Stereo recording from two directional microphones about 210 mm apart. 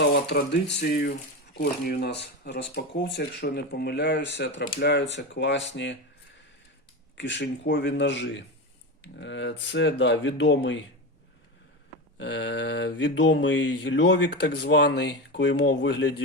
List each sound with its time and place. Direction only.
0.0 s speech: 50° left (ahead or behind)
7.2 s mantra: 55° left (ahead or behind)
12.1 s mantra: 55° left (ahead or behind)